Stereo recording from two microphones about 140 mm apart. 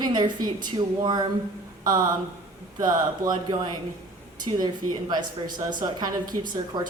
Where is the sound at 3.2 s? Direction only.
90° right.